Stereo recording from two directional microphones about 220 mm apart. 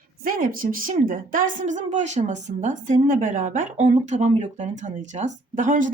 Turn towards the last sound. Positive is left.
turn(degrees=-35)  # may be behind; listen again after turning